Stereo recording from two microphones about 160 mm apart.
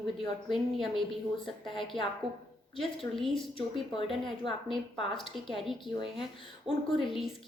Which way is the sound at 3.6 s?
30° left (ahead or behind).